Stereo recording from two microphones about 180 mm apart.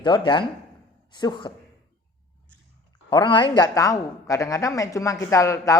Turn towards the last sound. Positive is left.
turn(degrees=15)  # may be behind; listen again after turning